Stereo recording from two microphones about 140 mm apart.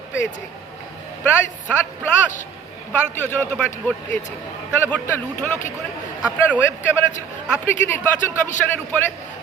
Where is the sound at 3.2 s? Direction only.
15° left (ahead or behind).